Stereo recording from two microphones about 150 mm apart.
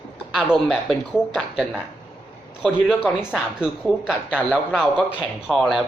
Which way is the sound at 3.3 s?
5° right (ahead or behind).